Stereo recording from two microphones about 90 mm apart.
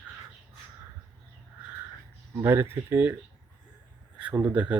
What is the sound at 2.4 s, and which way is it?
Speech, 25° right (ahead or behind).